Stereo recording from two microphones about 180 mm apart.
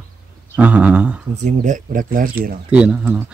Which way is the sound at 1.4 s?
45° right (ahead or behind).